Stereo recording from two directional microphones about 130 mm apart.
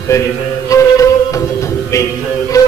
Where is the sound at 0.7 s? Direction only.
25° left (ahead or behind).